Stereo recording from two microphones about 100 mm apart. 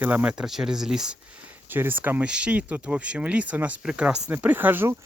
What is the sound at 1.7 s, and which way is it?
Speech, 20° right (ahead or behind).